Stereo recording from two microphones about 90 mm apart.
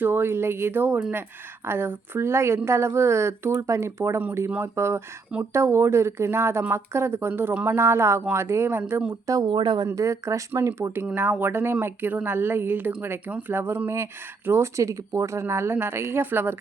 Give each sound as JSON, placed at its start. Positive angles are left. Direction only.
{"t": 0.0, "sound": "speech", "side_deg": -25}
{"t": 7.8, "sound": "speech", "side_deg": -30}
{"t": 9.2, "sound": "speech", "side_deg": -40}
{"t": 9.5, "sound": "speech", "side_deg": -60}
{"t": 9.8, "sound": "speech", "side_deg": -40}